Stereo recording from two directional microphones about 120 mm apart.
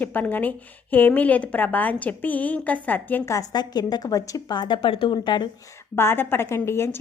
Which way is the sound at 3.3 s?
35° left (ahead or behind).